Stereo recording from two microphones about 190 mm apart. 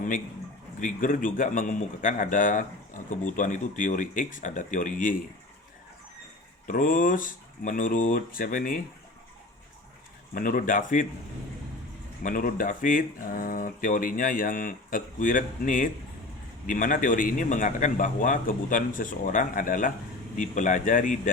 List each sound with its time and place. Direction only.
0.8 s a man's voice: 45° left (ahead or behind)
6.7 s a man's voice: 45° left (ahead or behind)
10.3 s a man's voice: 45° left (ahead or behind)
12.2 s a man's voice: 45° left (ahead or behind)